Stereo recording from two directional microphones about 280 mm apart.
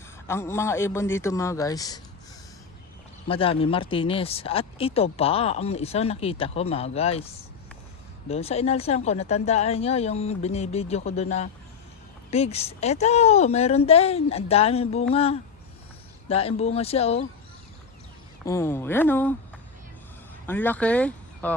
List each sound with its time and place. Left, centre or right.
0.3 s a man's voice: centre
3.2 s speech: centre
8.3 s speech: left
18.4 s a man's voice: centre
20.5 s speech: centre